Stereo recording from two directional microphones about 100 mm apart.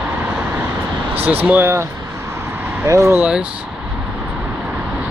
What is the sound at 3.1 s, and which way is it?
Speech, 10° right (ahead or behind).